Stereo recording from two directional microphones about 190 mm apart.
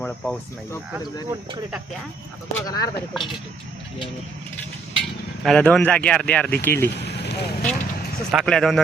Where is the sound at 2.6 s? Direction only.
20° left (ahead or behind).